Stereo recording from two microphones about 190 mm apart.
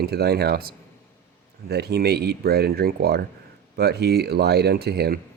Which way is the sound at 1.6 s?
55° right (ahead or behind).